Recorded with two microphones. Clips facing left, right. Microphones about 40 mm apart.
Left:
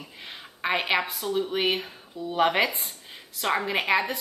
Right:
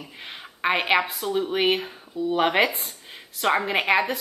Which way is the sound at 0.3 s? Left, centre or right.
Centre.